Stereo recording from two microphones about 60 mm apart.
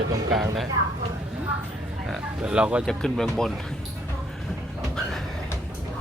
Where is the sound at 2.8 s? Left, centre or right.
Centre.